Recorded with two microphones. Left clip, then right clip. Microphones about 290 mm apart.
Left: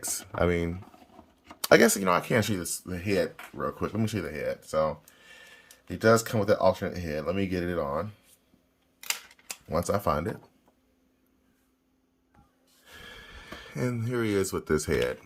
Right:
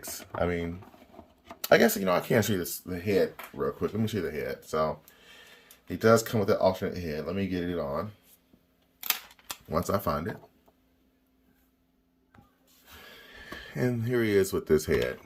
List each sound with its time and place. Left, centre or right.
0.0 s speech: centre
9.7 s speech: centre
13.1 s speech: centre